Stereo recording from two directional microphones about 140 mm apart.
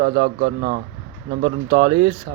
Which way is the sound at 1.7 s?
40° right (ahead or behind).